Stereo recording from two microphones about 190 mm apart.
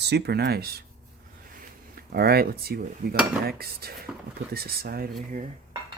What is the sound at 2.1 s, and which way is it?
Speech, 55° right (ahead or behind).